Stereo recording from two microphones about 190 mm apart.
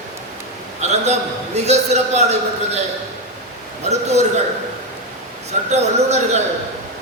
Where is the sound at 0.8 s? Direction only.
35° right (ahead or behind).